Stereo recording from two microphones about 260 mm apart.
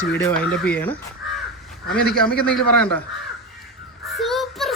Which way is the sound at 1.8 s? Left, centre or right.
Left.